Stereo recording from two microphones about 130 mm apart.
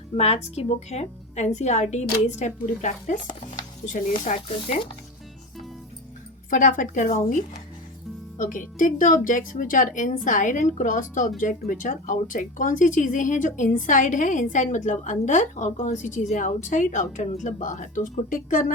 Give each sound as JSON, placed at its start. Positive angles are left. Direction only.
{"t": 0.2, "sound": "a woman's voice", "side_deg": 55}
{"t": 6.5, "sound": "speech", "side_deg": 85}
{"t": 8.4, "sound": "speech", "side_deg": 90}